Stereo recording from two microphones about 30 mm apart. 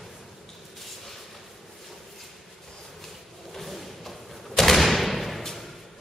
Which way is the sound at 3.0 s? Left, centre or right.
Centre.